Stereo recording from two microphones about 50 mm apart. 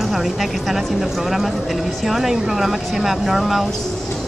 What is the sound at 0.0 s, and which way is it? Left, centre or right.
Speech, centre.